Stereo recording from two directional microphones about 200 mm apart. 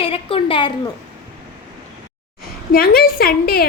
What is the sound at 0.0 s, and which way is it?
Speech, 30° left (ahead or behind).